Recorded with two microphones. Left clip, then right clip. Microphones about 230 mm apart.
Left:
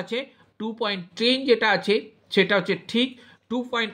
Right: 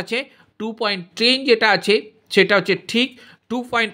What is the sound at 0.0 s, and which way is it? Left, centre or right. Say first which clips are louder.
Speech: right 5 dB; right.